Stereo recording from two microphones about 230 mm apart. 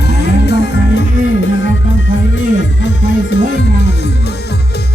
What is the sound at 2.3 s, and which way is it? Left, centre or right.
Music, left.